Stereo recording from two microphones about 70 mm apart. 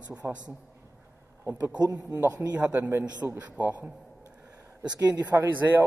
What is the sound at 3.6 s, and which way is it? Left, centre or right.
Speech, right.